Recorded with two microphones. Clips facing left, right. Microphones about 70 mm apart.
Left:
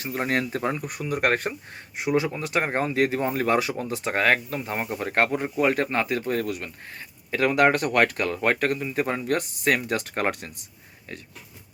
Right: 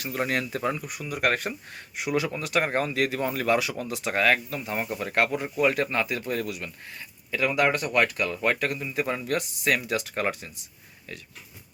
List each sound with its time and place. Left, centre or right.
0.0 s speech: left
2.0 s speech: left